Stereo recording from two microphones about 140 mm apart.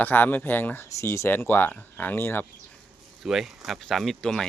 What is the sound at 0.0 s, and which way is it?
Speech, 15° left (ahead or behind).